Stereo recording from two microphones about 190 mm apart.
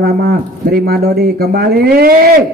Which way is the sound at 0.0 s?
55° right (ahead or behind).